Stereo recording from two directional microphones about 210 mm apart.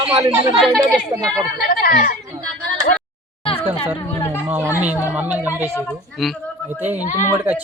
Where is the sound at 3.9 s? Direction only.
10° left (ahead or behind).